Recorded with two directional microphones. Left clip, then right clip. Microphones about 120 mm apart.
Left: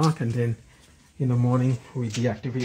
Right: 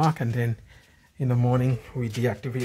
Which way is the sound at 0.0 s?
40° right (ahead or behind).